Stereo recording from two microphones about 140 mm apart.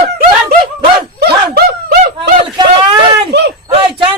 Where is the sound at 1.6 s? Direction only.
90° right.